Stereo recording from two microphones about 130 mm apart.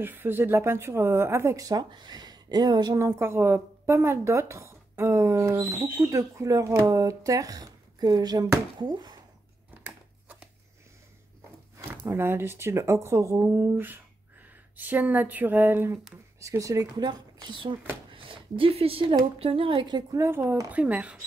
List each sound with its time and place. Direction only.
0.0 s speech: 15° right (ahead or behind); by 3.1 s 30° right (ahead or behind)
3.1 s speech: 20° right (ahead or behind); by 9.2 s 35° right (ahead or behind)
12.1 s a woman's voice: 20° right (ahead or behind)
20.2 s speech: 20° right (ahead or behind)